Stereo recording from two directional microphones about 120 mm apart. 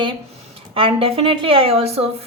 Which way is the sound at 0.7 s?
50° right (ahead or behind).